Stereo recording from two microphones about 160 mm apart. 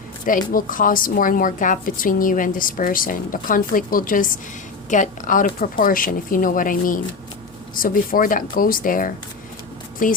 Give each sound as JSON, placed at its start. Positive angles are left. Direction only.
{"t": 0.5, "sound": "a woman's voice", "side_deg": 60}